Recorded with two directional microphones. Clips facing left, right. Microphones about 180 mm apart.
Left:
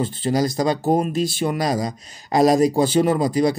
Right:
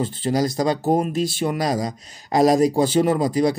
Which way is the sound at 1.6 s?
40° right (ahead or behind).